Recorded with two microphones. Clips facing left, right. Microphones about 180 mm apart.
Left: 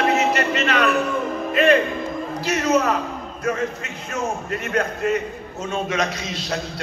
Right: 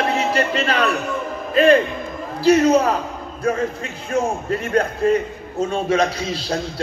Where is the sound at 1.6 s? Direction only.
30° right (ahead or behind).